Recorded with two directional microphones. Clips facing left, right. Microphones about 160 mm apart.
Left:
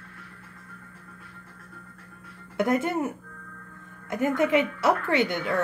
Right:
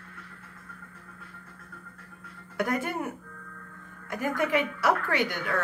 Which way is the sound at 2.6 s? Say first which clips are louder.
Left 5 dB; 25° left (ahead or behind).